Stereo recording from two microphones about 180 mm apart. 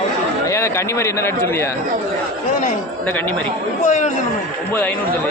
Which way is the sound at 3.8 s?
45° left (ahead or behind).